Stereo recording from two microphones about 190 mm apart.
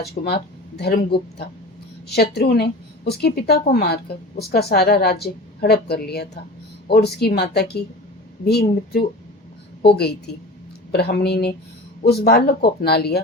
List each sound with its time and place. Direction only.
0.0 s a woman's voice: 60° left (ahead or behind)
10.9 s a woman's voice: 60° left (ahead or behind)